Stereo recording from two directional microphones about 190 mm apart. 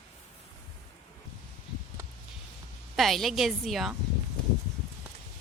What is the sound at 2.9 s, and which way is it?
A woman's voice, centre (ahead or behind).